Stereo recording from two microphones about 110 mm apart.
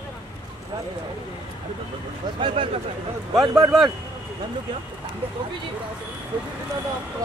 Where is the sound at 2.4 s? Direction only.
50° right (ahead or behind).